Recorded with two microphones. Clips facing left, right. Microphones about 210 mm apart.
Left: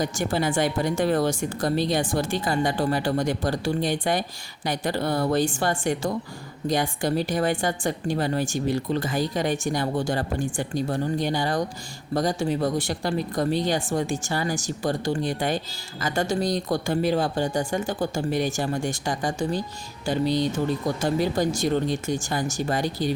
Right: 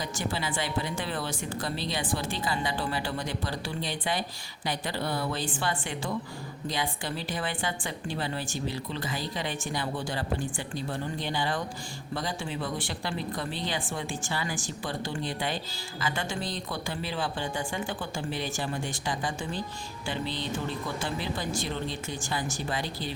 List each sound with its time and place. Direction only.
0.0 s speech: 50° left (ahead or behind)